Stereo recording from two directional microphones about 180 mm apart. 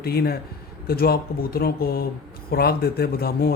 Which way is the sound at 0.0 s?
60° left (ahead or behind).